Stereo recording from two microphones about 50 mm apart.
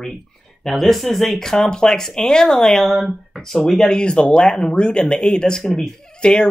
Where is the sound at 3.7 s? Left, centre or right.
Centre.